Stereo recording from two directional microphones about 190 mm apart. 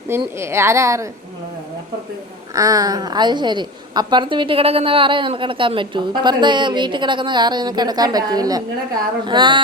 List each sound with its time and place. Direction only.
0.3 s speech: 15° right (ahead or behind)
2.6 s a woman's voice: 20° right (ahead or behind)